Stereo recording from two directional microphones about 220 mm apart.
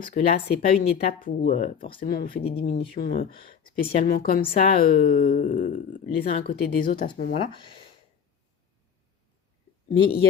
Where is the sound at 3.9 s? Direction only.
40° left (ahead or behind).